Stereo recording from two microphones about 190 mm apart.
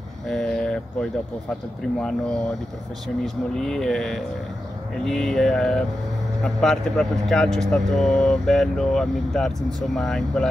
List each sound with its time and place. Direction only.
0.3 s a sound: 5° left (ahead or behind)
2.0 s speech: 5° left (ahead or behind)
3.5 s speech: 5° left (ahead or behind)